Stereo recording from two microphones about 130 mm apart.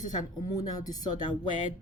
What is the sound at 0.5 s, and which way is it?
Speech, 30° left (ahead or behind).